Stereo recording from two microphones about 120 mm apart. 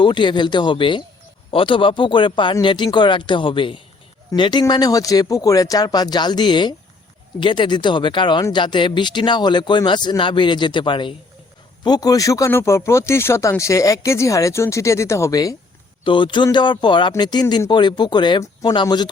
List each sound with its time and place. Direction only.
0.0 s speech: 40° left (ahead or behind)
16.0 s speech: 45° left (ahead or behind)